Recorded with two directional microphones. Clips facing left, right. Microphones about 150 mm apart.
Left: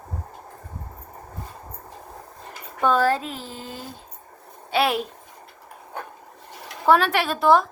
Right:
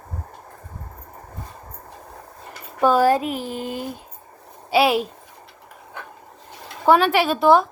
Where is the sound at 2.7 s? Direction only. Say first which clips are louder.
Right 4 dB; 10° right (ahead or behind).